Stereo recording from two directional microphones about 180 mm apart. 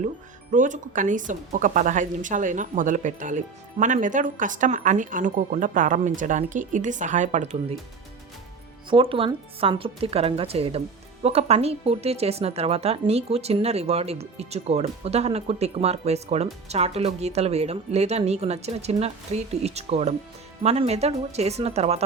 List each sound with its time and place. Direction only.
0.5 s speech: 45° right (ahead or behind)
8.9 s speech: 30° right (ahead or behind)